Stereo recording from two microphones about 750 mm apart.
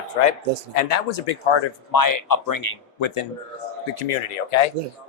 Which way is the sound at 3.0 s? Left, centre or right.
Left.